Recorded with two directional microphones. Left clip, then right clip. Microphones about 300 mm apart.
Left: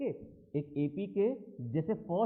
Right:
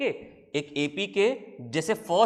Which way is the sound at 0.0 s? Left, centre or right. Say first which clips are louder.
Right 9 dB; centre.